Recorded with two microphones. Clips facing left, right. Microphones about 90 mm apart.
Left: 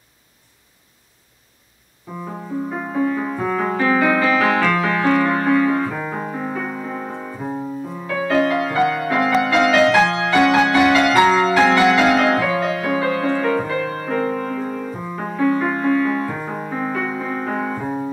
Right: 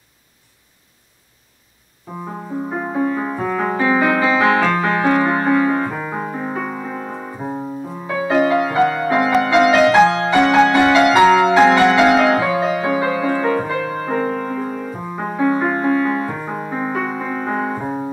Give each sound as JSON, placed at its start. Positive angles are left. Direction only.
{"t": 2.2, "sound": "music", "side_deg": -20}
{"t": 5.9, "sound": "music", "side_deg": -10}
{"t": 7.2, "sound": "piano", "side_deg": -20}
{"t": 8.1, "sound": "music", "side_deg": -15}
{"t": 11.8, "sound": "music", "side_deg": -35}
{"t": 12.2, "sound": "music", "side_deg": -10}
{"t": 15.5, "sound": "music", "side_deg": -25}
{"t": 16.3, "sound": "music", "side_deg": -10}
{"t": 17.2, "sound": "music", "side_deg": -10}
{"t": 17.6, "sound": "music", "side_deg": -20}